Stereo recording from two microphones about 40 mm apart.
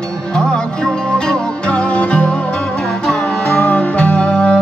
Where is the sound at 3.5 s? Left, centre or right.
Left.